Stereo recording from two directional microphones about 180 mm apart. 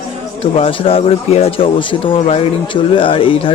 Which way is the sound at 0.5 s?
30° left (ahead or behind).